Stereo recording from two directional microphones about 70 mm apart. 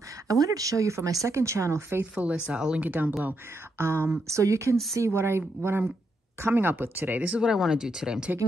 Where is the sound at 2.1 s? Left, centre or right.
Centre.